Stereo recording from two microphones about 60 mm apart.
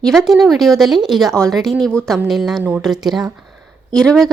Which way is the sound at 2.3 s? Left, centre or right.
Centre.